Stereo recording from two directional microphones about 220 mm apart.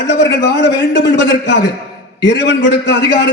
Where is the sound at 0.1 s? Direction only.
50° left (ahead or behind).